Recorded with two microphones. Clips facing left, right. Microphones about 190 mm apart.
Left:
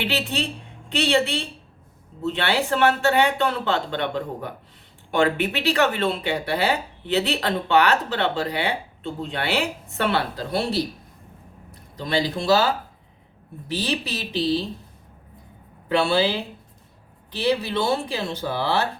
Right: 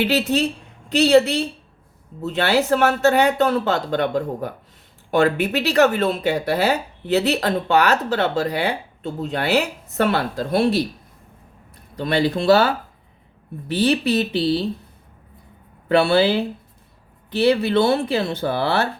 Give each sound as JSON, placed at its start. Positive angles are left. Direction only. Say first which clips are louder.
{"t": 0.0, "sound": "speech", "louder": "right 7 dB", "side_deg": -40}
{"t": 11.9, "sound": "speech", "louder": "right 4 dB", "side_deg": -60}
{"t": 15.9, "sound": "speech", "louder": "right 5 dB", "side_deg": -60}